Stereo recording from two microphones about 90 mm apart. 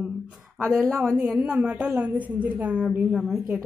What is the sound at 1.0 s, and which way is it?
A woman's voice, 10° right (ahead or behind).